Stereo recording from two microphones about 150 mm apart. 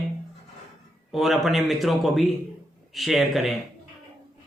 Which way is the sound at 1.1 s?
Centre (ahead or behind).